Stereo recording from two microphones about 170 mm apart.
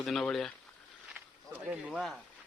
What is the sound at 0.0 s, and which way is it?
Speech, 5° left (ahead or behind).